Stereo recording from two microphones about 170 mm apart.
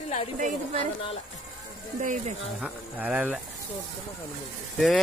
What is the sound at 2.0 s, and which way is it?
Speech, 45° right (ahead or behind).